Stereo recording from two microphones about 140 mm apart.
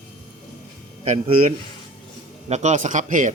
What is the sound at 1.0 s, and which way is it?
A man's voice, 55° right (ahead or behind).